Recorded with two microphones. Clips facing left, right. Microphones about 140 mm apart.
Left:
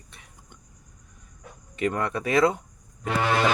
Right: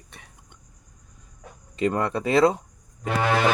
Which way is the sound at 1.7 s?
30° right (ahead or behind).